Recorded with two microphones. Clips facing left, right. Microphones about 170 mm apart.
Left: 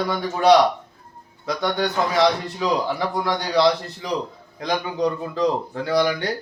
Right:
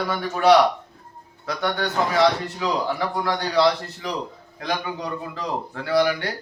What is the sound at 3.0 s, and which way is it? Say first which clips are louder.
A man's voice: left 1 dB; 15° left (ahead or behind).